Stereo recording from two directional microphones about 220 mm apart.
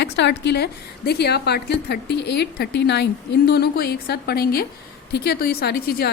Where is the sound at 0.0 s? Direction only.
50° left (ahead or behind).